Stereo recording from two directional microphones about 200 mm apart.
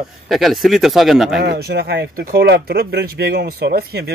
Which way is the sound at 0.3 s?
Centre (ahead or behind).